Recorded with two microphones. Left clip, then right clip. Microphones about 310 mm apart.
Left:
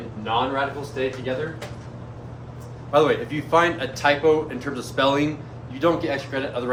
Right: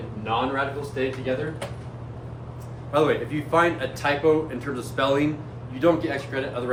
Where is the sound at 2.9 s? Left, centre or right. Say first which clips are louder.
Left 3 dB; left.